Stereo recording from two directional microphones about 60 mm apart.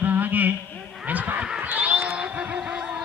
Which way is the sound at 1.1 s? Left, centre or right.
Right.